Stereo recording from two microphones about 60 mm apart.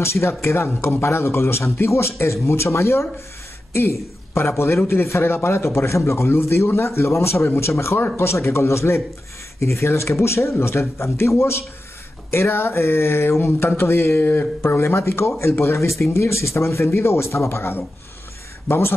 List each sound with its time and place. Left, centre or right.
0.0 s speech: left